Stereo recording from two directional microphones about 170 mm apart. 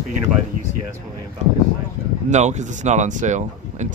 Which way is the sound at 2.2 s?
45° right (ahead or behind).